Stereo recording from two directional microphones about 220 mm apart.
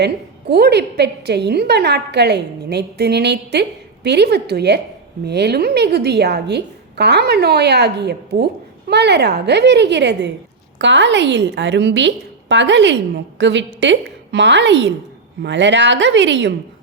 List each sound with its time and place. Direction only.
0.0 s a woman's voice: 45° right (ahead or behind)